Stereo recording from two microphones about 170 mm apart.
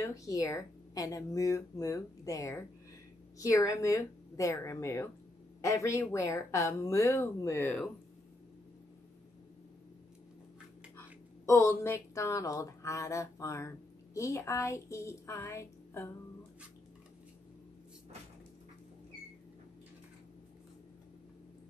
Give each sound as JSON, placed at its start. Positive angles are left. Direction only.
{"t": 0.0, "sound": "a woman's voice", "side_deg": 20}
{"t": 11.4, "sound": "speech", "side_deg": 15}